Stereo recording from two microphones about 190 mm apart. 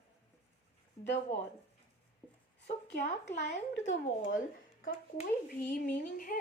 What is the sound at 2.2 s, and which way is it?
Dog, 5° left (ahead or behind).